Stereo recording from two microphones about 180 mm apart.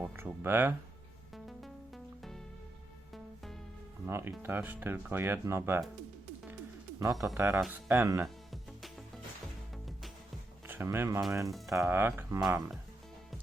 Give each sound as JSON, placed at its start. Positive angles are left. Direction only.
{"t": 0.0, "sound": "speech", "side_deg": -10}
{"t": 4.0, "sound": "speech", "side_deg": -15}
{"t": 7.0, "sound": "speech", "side_deg": -20}
{"t": 10.7, "sound": "speech", "side_deg": -15}